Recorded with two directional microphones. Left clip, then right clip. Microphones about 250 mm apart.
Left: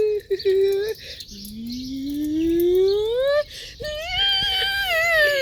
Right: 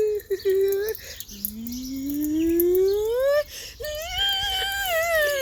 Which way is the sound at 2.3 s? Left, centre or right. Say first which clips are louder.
Left 2 dB; centre.